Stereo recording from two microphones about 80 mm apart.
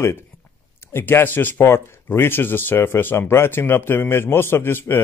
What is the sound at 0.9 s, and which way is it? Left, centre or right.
A man's voice, left.